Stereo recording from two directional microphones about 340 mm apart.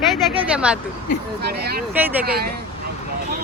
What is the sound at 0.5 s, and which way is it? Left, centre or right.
Speech, centre.